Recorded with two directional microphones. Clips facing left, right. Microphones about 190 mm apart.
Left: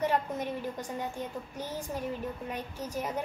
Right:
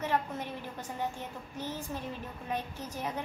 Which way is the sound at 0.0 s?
15° left (ahead or behind).